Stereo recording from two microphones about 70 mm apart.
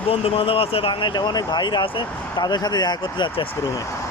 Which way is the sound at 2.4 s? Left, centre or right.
Left.